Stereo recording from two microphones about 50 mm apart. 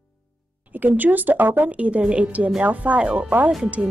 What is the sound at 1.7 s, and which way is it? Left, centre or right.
Speech, right.